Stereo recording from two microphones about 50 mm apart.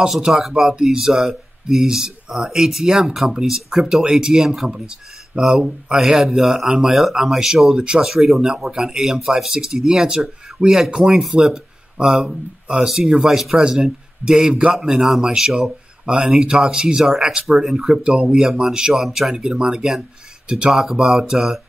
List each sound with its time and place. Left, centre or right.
0.3 s speech: centre
18.0 s speech: right; by 19.3 s centre
19.3 s speech: centre